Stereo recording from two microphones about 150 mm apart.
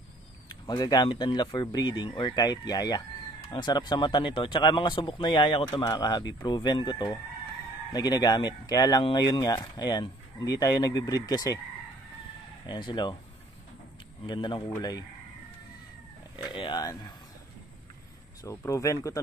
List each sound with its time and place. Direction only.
0.5 s speech: 25° left (ahead or behind)
12.6 s speech: 30° left (ahead or behind)
14.2 s speech: 30° left (ahead or behind)
16.5 s speech: 30° left (ahead or behind)
18.4 s speech: 20° left (ahead or behind)